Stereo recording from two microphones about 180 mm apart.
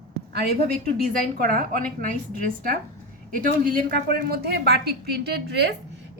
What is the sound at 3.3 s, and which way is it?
A woman's voice, 50° right (ahead or behind).